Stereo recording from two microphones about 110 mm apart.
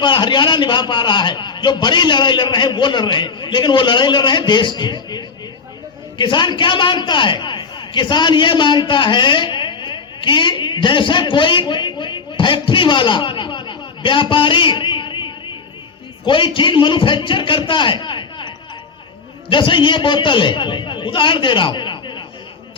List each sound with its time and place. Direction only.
0.0 s a man's voice: 45° left (ahead or behind)